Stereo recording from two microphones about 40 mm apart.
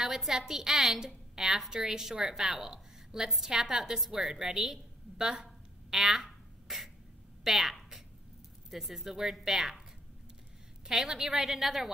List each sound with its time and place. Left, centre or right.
0.3 s a woman's voice: centre
10.9 s a woman's voice: centre